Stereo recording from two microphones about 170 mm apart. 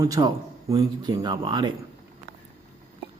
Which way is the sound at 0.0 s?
20° right (ahead or behind).